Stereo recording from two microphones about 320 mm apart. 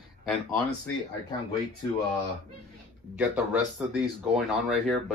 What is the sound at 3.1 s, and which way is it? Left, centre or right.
Speech, centre.